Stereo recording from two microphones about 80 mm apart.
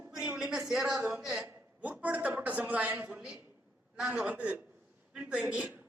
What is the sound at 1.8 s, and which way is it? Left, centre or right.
A man's voice, centre.